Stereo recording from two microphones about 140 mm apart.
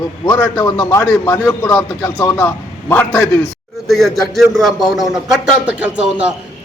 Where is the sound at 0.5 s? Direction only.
25° left (ahead or behind).